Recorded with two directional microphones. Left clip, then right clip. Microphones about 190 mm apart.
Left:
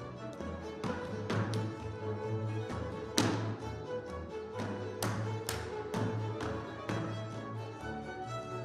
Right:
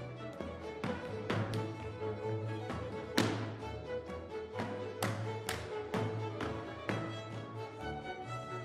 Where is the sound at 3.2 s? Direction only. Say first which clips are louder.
Left 1 dB; 30° left (ahead or behind).